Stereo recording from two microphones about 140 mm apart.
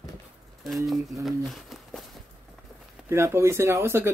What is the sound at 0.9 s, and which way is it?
Speech, centre (ahead or behind).